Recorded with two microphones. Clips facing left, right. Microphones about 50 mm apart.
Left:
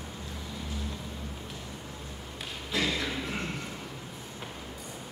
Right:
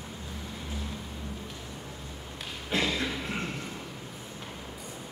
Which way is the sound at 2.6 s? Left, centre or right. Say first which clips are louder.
Right 1 dB; right.